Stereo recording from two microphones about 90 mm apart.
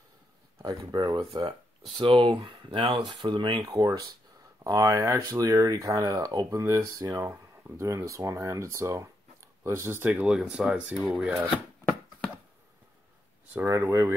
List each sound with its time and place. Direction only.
0.6 s speech: 45° right (ahead or behind); by 11.3 s 5° right (ahead or behind)
13.7 s speech: 30° right (ahead or behind)